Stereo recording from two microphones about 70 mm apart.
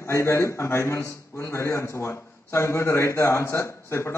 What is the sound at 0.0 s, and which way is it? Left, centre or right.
A man's voice, left.